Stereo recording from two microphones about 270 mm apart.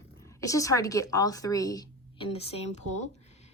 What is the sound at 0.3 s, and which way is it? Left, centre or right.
Speech, centre.